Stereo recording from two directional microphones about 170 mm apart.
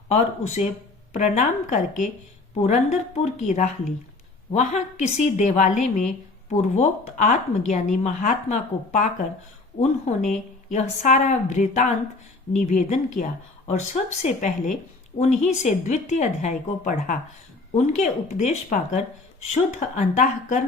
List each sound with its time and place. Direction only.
0.1 s a woman's voice: 45° left (ahead or behind)